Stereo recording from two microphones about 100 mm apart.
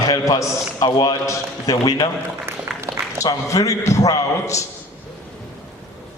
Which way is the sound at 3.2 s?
35° left (ahead or behind).